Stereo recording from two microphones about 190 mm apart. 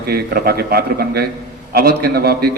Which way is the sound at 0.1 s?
55° right (ahead or behind).